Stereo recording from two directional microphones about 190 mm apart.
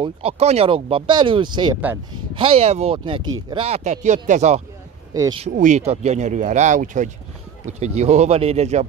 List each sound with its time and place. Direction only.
0.0 s speech: 30° right (ahead or behind)
5.1 s speech: 15° right (ahead or behind)
5.4 s speech: 40° right (ahead or behind)